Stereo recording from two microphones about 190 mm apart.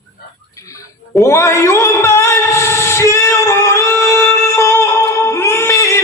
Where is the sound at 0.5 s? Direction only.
15° left (ahead or behind).